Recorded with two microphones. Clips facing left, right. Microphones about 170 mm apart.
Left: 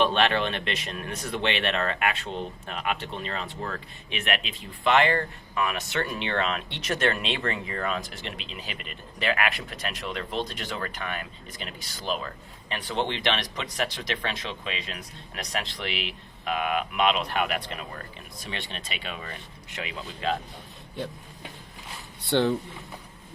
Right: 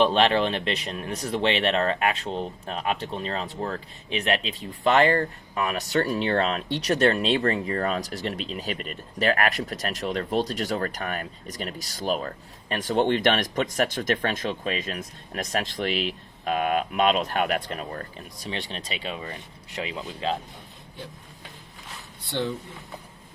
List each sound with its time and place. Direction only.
0.0 s speech: 30° right (ahead or behind)
22.3 s speech: 70° left (ahead or behind)